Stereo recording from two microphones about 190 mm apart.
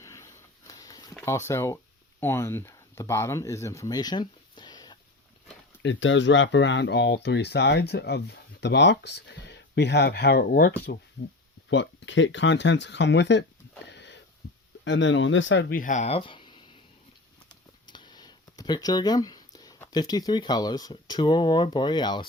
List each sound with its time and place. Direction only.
0.0 s a sound: 15° left (ahead or behind)
1.2 s speech: 15° left (ahead or behind)
5.8 s speech: 80° left; by 10.9 s 55° left (ahead or behind)
11.7 s speech: 75° left (ahead or behind)
13.9 s wheeze: 65° left (ahead or behind)
14.4 s a sound: 60° left (ahead or behind)
14.8 s speech: 75° left (ahead or behind)
15.7 s speech: 45° left (ahead or behind); by 16.6 s 25° left (ahead or behind)
17.8 s speech: 25° left (ahead or behind)